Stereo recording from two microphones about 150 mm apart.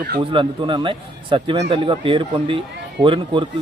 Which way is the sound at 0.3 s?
35° right (ahead or behind).